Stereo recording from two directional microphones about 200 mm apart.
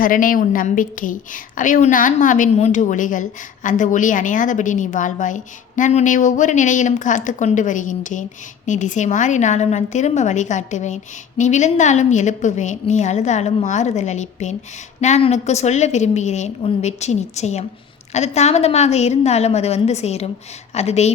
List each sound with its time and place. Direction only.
0.0 s a woman's voice: 45° left (ahead or behind)